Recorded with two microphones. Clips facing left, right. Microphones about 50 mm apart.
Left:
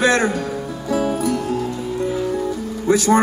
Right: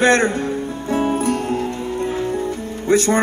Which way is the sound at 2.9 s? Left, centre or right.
Right.